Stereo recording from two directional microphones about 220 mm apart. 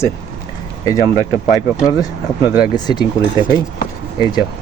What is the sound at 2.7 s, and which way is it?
Speech, 20° left (ahead or behind).